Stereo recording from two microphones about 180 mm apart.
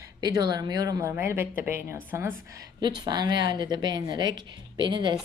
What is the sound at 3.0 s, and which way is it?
Speech, 25° right (ahead or behind).